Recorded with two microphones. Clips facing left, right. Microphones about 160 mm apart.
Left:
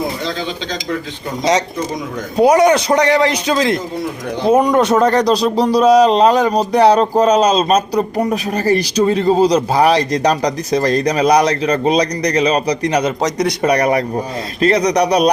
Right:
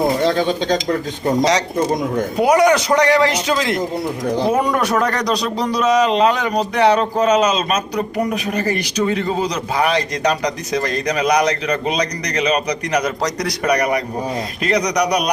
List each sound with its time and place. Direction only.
0.2 s speech: 50° right (ahead or behind)
2.4 s a man's voice: 20° left (ahead or behind)